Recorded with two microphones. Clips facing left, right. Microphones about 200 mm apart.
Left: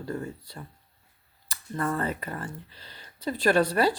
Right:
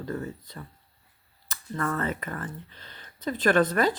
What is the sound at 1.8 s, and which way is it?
Speech, 30° left (ahead or behind).